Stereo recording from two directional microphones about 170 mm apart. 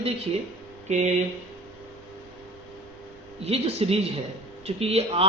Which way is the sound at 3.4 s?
35° right (ahead or behind).